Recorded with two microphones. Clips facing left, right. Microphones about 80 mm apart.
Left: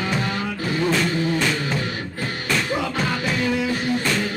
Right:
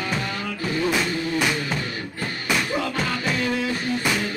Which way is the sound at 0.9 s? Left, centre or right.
Centre.